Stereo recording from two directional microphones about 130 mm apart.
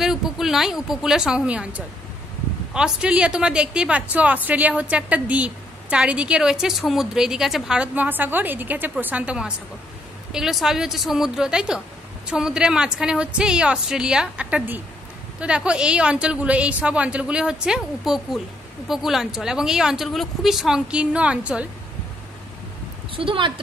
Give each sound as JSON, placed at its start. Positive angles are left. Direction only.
{"t": 0.0, "sound": "a woman's voice", "side_deg": -5}
{"t": 23.1, "sound": "a woman's voice", "side_deg": -40}